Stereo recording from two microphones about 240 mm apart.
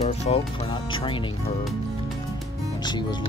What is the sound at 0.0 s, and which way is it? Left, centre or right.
Speech, left.